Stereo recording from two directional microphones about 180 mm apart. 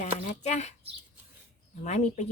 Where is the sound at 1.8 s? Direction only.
40° left (ahead or behind).